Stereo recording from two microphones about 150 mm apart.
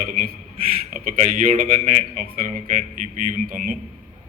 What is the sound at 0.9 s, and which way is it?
A man's voice, 60° right (ahead or behind).